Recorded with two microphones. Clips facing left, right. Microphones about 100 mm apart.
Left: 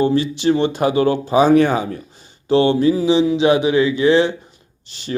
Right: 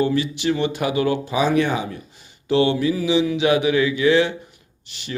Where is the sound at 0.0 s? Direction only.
30° left (ahead or behind).